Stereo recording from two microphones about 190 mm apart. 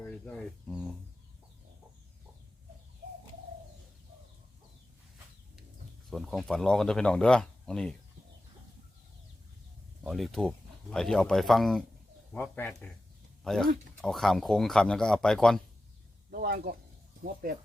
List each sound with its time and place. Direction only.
0.0 s speech: 5° left (ahead or behind)
6.1 s speech: centre (ahead or behind)
10.0 s speech: centre (ahead or behind)
16.3 s speech: 50° right (ahead or behind)